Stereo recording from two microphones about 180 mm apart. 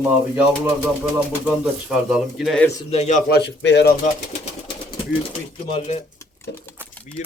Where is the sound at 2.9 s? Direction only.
40° left (ahead or behind).